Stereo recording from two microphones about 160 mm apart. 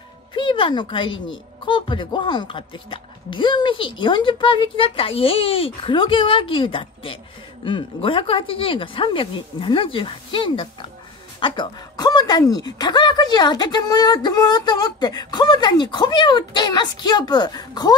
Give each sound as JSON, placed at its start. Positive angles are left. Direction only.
{"t": 0.3, "sound": "a woman's voice", "side_deg": 30}